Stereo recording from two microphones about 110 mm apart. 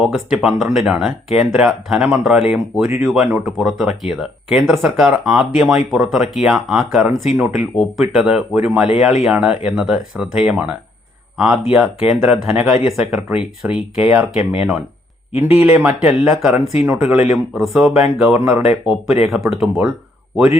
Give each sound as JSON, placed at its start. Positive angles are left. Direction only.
{"t": 0.0, "sound": "speech", "side_deg": -5}
{"t": 12.2, "sound": "speech", "side_deg": -5}
{"t": 15.4, "sound": "speech", "side_deg": -20}
{"t": 16.0, "sound": "speech", "side_deg": 0}